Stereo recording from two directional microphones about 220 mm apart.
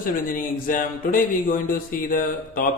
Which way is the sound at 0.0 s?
40° left (ahead or behind).